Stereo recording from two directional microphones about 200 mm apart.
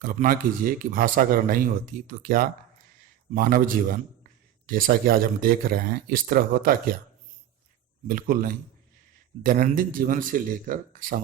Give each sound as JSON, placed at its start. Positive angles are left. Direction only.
{"t": 0.0, "sound": "a man's voice", "side_deg": -45}
{"t": 8.0, "sound": "a man's voice", "side_deg": -45}